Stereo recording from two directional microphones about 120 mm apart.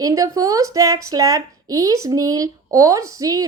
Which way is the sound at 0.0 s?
30° right (ahead or behind).